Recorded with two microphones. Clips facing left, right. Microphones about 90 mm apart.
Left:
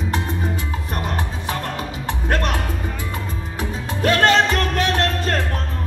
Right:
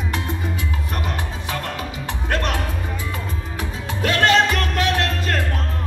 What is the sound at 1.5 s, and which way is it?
Music, 35° left (ahead or behind).